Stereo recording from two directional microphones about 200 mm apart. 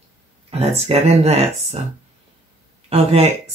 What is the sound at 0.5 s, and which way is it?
Speech, 30° right (ahead or behind).